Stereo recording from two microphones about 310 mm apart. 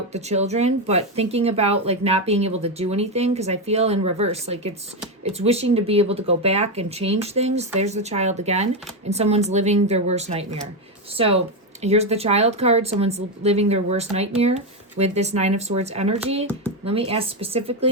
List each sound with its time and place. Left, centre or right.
0.1 s speech: right